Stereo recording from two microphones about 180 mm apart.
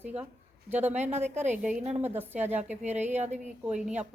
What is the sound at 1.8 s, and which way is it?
Speech, 40° right (ahead or behind).